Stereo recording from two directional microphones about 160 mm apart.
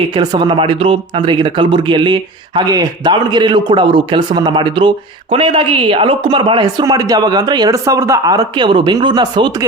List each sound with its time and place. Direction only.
0.1 s speech: 25° right (ahead or behind)